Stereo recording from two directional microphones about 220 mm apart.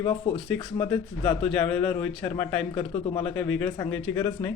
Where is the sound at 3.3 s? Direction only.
5° left (ahead or behind).